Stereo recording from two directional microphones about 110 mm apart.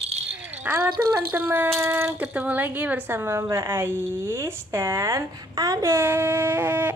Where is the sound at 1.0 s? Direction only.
20° right (ahead or behind).